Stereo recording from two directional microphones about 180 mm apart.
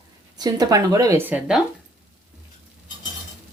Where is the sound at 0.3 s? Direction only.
20° right (ahead or behind).